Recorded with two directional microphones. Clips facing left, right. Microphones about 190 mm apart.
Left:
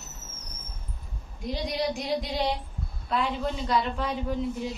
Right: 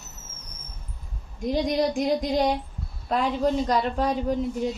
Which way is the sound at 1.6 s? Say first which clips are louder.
Right 4 dB; 45° right (ahead or behind).